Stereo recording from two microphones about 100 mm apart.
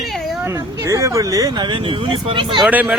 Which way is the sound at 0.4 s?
30° right (ahead or behind).